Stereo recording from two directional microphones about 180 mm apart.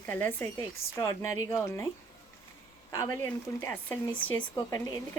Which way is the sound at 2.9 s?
15° left (ahead or behind).